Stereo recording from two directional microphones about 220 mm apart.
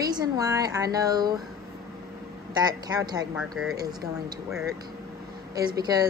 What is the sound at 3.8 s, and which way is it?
Speech, 20° right (ahead or behind).